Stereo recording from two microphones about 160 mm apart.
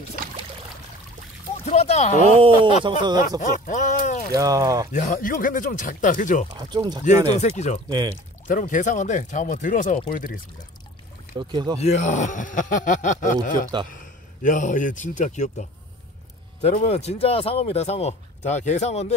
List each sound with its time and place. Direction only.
1.7 s speech: 45° left (ahead or behind)
2.3 s speech: 35° right (ahead or behind)
3.3 s speech: 55° left (ahead or behind)
4.4 s speech: 20° right (ahead or behind)
4.9 s speech: 55° left (ahead or behind)
6.5 s speech: 25° right (ahead or behind)
7.3 s speech: 45° left (ahead or behind)
11.3 s speech: 30° right (ahead or behind)
11.8 s speech: 45° left (ahead or behind)
16.6 s speech: 40° left (ahead or behind)